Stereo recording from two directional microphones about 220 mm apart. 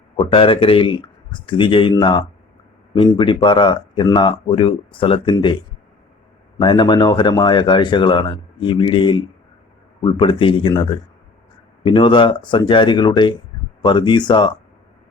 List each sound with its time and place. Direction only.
0.2 s speech: 25° left (ahead or behind)
6.6 s speech: 20° left (ahead or behind)